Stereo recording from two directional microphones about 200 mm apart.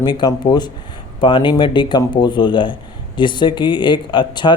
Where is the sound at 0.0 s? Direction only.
20° left (ahead or behind).